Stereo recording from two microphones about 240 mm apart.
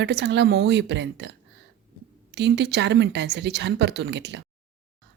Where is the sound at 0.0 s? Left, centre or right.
Right.